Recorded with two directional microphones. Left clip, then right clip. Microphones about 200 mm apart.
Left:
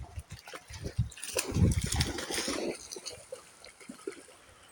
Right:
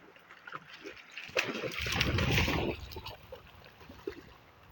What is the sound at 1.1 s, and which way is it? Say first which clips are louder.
Splash: right 3 dB; 40° left (ahead or behind).